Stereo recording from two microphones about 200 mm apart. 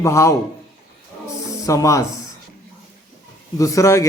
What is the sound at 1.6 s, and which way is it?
Speech, 15° left (ahead or behind).